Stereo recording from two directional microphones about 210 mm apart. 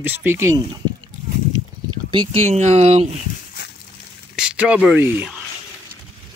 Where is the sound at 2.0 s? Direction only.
25° right (ahead or behind).